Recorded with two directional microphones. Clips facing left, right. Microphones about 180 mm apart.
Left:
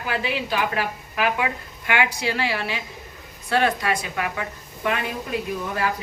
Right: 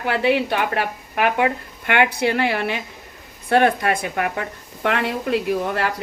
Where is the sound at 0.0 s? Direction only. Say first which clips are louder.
Right 7 dB; 65° right (ahead or behind).